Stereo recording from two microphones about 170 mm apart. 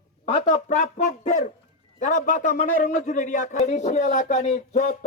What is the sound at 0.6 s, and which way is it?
A man's voice, 45° left (ahead or behind).